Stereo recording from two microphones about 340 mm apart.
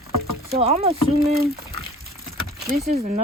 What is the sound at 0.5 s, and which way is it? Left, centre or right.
Speech, centre.